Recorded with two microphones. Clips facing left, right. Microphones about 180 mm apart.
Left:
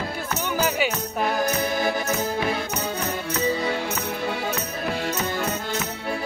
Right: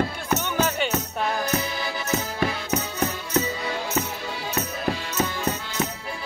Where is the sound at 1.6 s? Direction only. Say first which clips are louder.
Left 6 dB; 50° left (ahead or behind).